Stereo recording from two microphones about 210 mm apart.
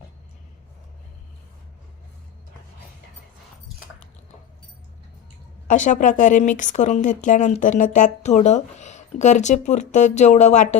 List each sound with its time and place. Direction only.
5.6 s speech: 35° left (ahead or behind)